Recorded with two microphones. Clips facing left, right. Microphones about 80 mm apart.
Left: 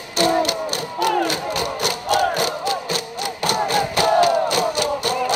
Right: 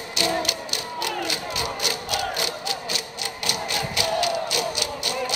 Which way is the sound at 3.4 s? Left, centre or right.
Left.